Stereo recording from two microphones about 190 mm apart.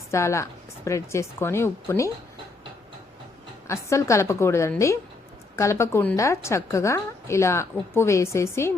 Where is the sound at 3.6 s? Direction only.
15° left (ahead or behind).